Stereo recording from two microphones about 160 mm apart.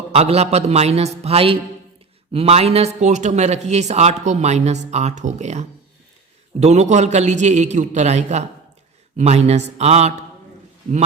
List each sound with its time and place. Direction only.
0.1 s a man's voice: 40° right (ahead or behind)